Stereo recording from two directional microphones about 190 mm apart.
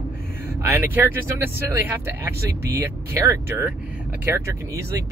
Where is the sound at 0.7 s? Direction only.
10° right (ahead or behind).